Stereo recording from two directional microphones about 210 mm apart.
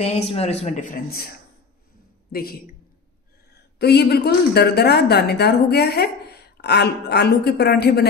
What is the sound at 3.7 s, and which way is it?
A woman's voice, 50° left (ahead or behind).